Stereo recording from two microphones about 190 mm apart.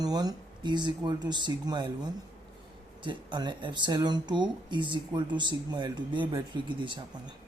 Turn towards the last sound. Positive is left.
turn(degrees=-25)  # may be behind; listen again after turning